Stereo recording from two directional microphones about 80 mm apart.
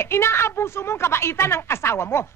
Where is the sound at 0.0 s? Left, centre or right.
Left.